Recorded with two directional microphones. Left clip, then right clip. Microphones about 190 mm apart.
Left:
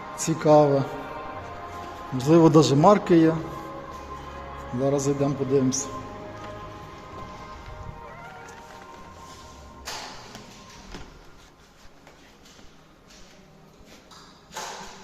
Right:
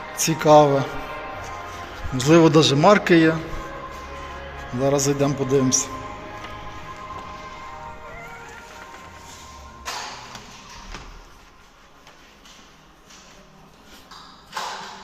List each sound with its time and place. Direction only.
0.2 s speech: 10° left (ahead or behind)
2.1 s speech: 5° left (ahead or behind)
2.4 s a man's voice: 20° left (ahead or behind)
2.9 s speech: 10° left (ahead or behind)
4.8 s speech: 5° left (ahead or behind)